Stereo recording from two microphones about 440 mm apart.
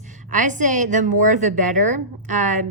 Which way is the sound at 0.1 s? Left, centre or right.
Centre.